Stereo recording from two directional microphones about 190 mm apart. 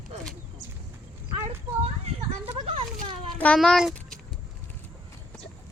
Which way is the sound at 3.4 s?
5° left (ahead or behind).